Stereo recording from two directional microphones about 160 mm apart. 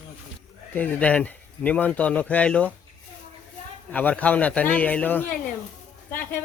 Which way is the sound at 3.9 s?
10° left (ahead or behind).